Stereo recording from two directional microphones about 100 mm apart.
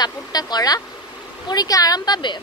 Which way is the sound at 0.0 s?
40° left (ahead or behind).